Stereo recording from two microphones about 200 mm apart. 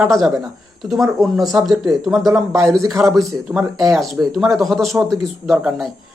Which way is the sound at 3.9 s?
Centre (ahead or behind).